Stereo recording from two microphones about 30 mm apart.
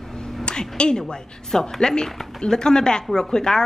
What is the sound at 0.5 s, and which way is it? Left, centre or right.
A woman's voice, left.